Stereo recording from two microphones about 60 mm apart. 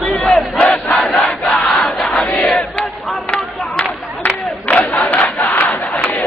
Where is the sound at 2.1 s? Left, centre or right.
Left.